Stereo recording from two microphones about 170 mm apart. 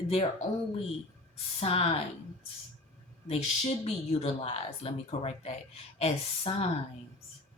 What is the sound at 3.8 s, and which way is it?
Speech, 35° left (ahead or behind).